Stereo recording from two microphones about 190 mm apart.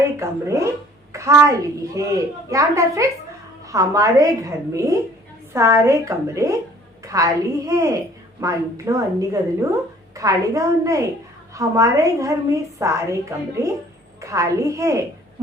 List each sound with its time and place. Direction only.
0.0 s a woman's voice: 15° right (ahead or behind)